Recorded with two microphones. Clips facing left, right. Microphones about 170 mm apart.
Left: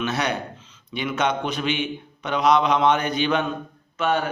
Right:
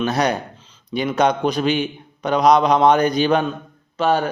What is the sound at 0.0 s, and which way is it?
Speech, 40° right (ahead or behind).